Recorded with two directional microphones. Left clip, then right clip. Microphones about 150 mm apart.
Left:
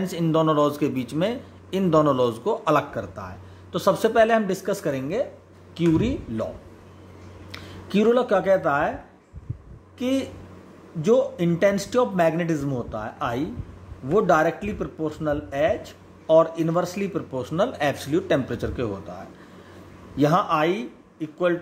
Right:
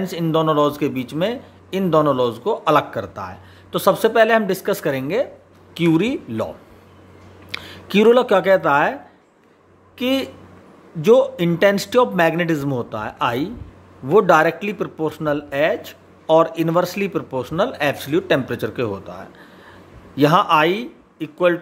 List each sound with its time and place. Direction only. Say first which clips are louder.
0.0 s a man's voice: right 3 dB; 20° right (ahead or behind); by 6.5 s 35° right (ahead or behind)
7.5 s speech: right 7 dB; 35° right (ahead or behind)
9.9 s a man's voice: right 5 dB; 30° right (ahead or behind)